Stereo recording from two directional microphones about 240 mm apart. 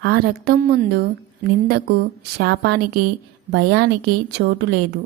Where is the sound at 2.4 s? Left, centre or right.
Right.